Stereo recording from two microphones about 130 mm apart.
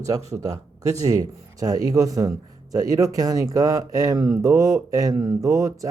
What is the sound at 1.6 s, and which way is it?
Speech, 25° right (ahead or behind).